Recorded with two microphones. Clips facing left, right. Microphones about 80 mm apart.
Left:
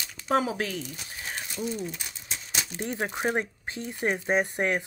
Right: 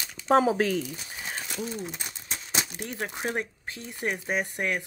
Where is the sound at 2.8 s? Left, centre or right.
Left.